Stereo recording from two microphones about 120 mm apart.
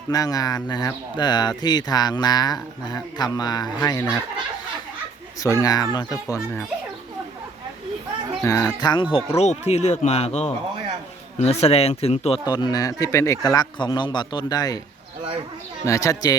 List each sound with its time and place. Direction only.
0.1 s speech: 30° left (ahead or behind)
5.4 s speech: 30° left (ahead or behind)
8.4 s speech: 30° left (ahead or behind)
9.4 s speech: 65° left (ahead or behind)
12.5 s speech: 35° left (ahead or behind)
15.8 s speech: 25° left (ahead or behind)